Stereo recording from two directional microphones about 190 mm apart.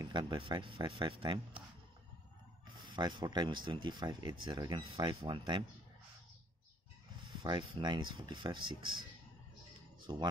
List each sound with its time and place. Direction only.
0.0 s speech: 20° right (ahead or behind)
3.0 s speech: 25° right (ahead or behind)
7.2 s speech: 25° right (ahead or behind)